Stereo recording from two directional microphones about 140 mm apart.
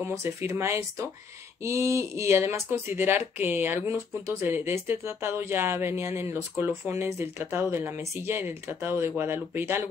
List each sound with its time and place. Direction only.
0.0 s speech: 20° right (ahead or behind)